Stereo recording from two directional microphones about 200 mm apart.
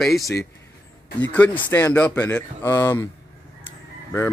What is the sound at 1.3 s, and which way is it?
Speech, 10° left (ahead or behind).